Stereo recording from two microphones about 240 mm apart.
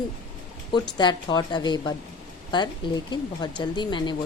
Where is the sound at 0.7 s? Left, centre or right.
Centre.